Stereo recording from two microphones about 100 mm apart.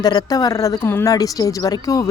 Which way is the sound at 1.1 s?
35° left (ahead or behind).